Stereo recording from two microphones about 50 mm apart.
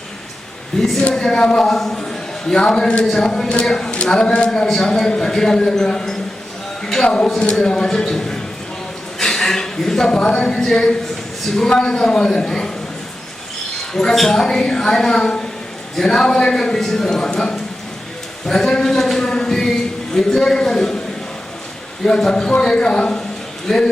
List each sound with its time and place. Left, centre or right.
0.8 s a man's voice: centre
9.1 s a sound: centre
10.1 s a man's voice: centre
13.9 s a man's voice: centre
22.0 s a man's voice: centre